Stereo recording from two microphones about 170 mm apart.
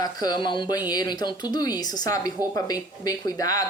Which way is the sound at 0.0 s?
25° left (ahead or behind).